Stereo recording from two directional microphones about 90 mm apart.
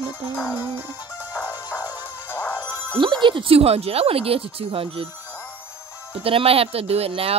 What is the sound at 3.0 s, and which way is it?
Speech, 65° right (ahead or behind).